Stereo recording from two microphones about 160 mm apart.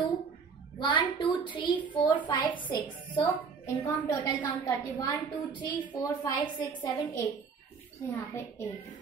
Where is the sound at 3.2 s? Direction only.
20° left (ahead or behind).